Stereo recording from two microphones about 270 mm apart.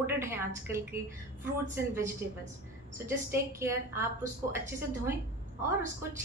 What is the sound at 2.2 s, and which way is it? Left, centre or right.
Speech, right.